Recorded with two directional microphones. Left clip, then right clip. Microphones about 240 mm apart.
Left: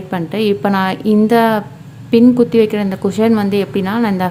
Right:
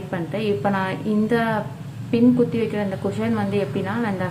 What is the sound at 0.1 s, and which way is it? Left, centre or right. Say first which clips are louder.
Speech: left 8 dB; left.